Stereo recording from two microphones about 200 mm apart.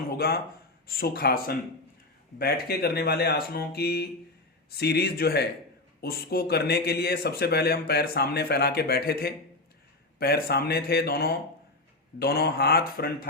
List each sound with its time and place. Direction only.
0.9 s a man's voice: 50° left (ahead or behind)